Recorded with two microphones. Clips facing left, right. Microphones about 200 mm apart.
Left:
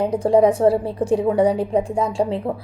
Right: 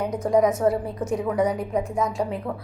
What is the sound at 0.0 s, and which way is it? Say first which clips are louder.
A woman's voice: left 5 dB; 30° left (ahead or behind).